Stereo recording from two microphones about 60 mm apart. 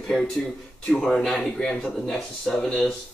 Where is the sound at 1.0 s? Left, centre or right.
Centre.